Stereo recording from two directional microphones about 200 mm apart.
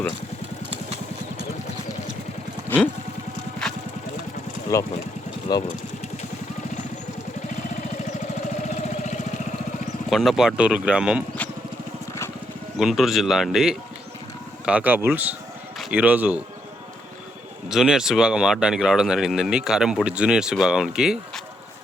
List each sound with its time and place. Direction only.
2.6 s vehicle: 10° left (ahead or behind)
4.7 s speech: 15° left (ahead or behind)
8.6 s engine: 35° left (ahead or behind)
10.1 s speech: centre (ahead or behind)
11.4 s a sound: 5° left (ahead or behind)
12.8 s speech: centre (ahead or behind)
17.7 s speech: centre (ahead or behind)